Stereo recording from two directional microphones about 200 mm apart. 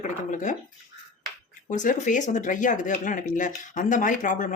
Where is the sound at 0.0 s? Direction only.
40° left (ahead or behind).